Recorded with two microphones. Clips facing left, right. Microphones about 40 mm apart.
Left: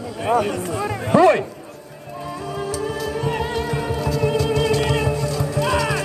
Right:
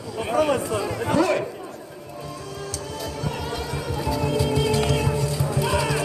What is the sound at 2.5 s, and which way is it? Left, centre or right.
Music, centre.